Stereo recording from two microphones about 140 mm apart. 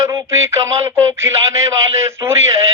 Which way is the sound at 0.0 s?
20° right (ahead or behind).